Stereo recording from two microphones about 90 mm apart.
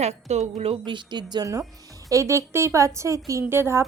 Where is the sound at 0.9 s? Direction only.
55° right (ahead or behind).